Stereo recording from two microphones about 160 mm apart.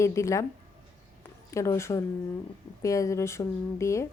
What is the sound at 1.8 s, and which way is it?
Speech, 20° left (ahead or behind).